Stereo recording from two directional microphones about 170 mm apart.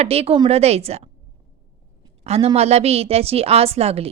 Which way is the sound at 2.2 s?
35° right (ahead or behind).